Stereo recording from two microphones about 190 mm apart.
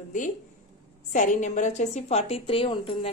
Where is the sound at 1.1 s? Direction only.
40° left (ahead or behind).